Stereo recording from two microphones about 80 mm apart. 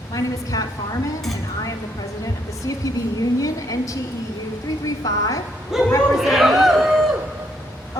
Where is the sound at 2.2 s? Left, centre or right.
Left.